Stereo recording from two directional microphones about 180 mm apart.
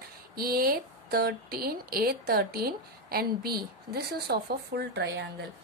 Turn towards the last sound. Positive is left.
turn(degrees=-70)  # may be behind; listen again after turning